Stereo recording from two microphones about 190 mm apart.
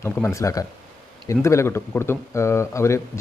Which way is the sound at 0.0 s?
15° left (ahead or behind).